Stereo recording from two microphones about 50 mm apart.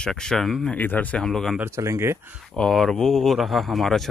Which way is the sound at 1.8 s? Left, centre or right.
Right.